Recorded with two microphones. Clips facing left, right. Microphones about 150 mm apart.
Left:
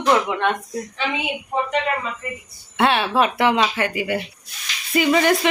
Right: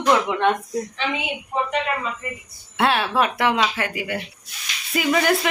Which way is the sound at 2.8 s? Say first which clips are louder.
Left 2 dB; centre (ahead or behind).